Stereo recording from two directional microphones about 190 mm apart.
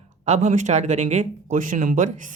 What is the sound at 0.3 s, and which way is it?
Speech, 40° right (ahead or behind).